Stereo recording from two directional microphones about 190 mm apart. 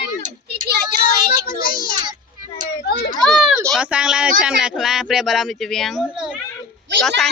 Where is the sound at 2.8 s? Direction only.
60° left (ahead or behind).